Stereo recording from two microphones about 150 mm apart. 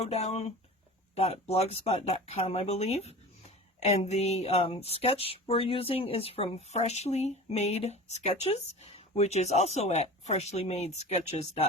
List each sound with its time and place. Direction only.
0.0 s speech: 45° left (ahead or behind)